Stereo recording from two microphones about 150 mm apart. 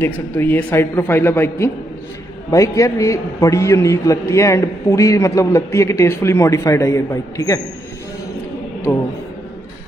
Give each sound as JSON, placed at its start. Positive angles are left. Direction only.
{"t": 0.0, "sound": "a man's voice", "side_deg": 15}